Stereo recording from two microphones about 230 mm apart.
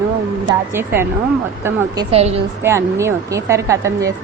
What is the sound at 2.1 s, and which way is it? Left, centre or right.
Speech, right.